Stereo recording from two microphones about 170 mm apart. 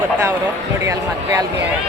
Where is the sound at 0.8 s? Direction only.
20° right (ahead or behind).